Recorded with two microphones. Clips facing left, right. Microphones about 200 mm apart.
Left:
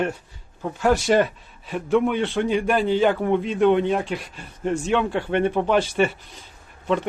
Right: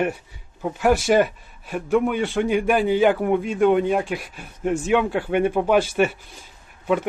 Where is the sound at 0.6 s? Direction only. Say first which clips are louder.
Right 1 dB; 10° right (ahead or behind).